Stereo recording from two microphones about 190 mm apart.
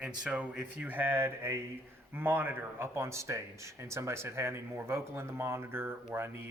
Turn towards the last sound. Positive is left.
turn(degrees=-10)  # may be behind; listen again after turning